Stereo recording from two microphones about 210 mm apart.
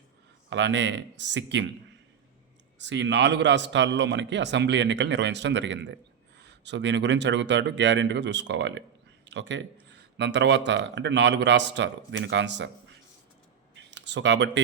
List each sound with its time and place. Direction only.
0.5 s a man's voice: 60° right (ahead or behind)
2.7 s a man's voice: 60° right (ahead or behind)
13.7 s a sound: 55° right (ahead or behind)